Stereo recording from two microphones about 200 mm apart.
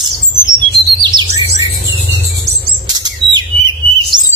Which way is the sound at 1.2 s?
20° right (ahead or behind).